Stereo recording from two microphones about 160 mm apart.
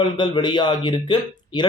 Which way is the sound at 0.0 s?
30° left (ahead or behind).